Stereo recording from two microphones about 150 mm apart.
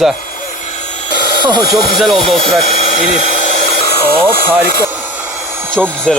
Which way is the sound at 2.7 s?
45° left (ahead or behind).